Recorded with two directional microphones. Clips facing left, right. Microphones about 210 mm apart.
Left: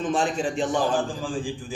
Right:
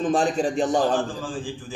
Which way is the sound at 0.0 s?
35° right (ahead or behind).